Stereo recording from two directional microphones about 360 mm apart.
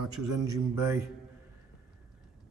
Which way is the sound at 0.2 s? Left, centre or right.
Right.